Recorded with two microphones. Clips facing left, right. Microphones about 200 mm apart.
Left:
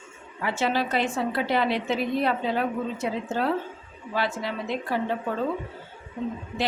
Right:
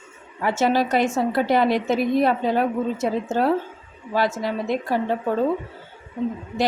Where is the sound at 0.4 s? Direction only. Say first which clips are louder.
Right 6 dB; 45° right (ahead or behind).